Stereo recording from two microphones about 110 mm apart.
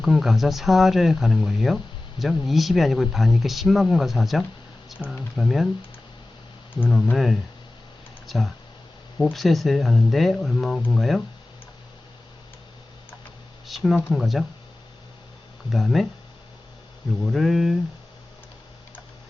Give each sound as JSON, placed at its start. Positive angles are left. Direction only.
{"t": 0.0, "sound": "speech", "side_deg": 0}
{"t": 6.9, "sound": "speech", "side_deg": 0}
{"t": 13.7, "sound": "speech", "side_deg": 0}
{"t": 15.7, "sound": "speech", "side_deg": 0}
{"t": 17.2, "sound": "speech", "side_deg": 0}